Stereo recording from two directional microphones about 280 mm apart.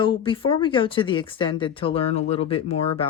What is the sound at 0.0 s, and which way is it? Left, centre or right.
Speech, centre.